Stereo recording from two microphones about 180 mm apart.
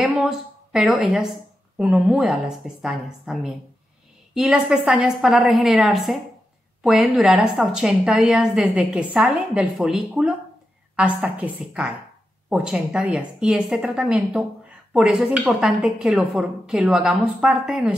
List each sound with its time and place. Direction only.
0.0 s a woman's voice: 5° right (ahead or behind)